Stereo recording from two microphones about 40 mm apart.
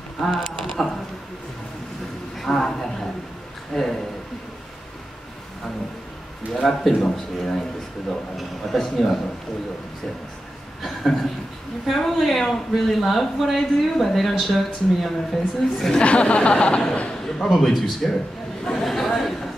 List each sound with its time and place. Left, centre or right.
0.2 s speech: centre
2.3 s a man's voice: centre
6.5 s a woman's voice: centre
11.9 s a woman's voice: centre
16.0 s a man's voice: left
17.4 s speech: centre
18.7 s chatter: centre